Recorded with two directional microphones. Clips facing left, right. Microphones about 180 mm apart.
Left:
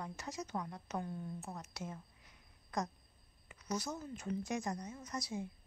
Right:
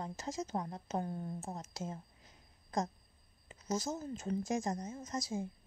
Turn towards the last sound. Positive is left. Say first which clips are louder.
# right 3 dB
turn(degrees=-25)  # may be behind; listen again after turning